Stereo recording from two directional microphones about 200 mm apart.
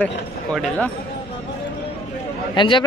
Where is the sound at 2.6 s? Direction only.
25° left (ahead or behind).